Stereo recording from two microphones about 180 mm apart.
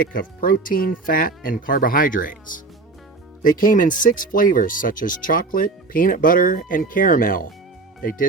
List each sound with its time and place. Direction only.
0.0 s speech: 50° left (ahead or behind)
3.4 s speech: 50° left (ahead or behind)